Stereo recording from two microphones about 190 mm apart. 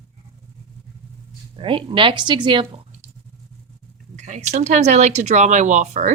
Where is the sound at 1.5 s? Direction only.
25° right (ahead or behind).